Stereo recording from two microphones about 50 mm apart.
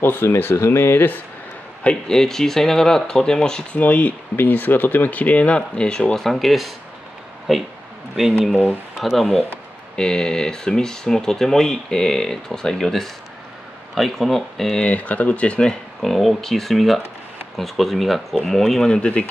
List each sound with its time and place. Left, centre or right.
0.0 s speech: left
0.6 s speech: left
2.0 s speech: centre
3.7 s speech: left
6.1 s speech: centre
9.9 s speech: centre
14.8 s speech: left
16.0 s speech: centre
18.9 s speech: left